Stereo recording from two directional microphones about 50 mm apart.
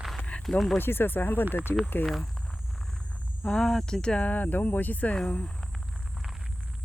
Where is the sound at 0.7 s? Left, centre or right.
Left.